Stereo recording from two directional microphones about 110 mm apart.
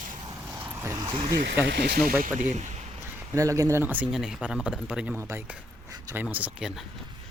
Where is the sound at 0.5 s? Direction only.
20° right (ahead or behind).